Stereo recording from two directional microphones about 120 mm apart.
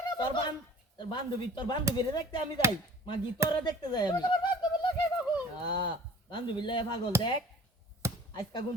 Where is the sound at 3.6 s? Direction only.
35° left (ahead or behind).